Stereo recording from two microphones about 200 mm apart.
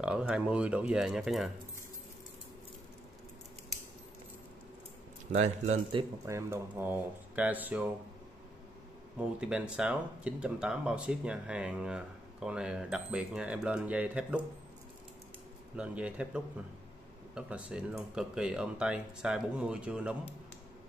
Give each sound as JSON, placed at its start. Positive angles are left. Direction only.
{"t": 0.0, "sound": "speech", "side_deg": -5}
{"t": 5.3, "sound": "speech", "side_deg": -35}
{"t": 6.2, "sound": "speech", "side_deg": -15}
{"t": 9.2, "sound": "speech", "side_deg": -5}
{"t": 15.7, "sound": "speech", "side_deg": -5}